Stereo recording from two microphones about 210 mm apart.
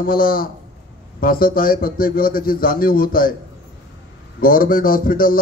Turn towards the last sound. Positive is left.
turn(degrees=40)  # may be behind; listen again after turning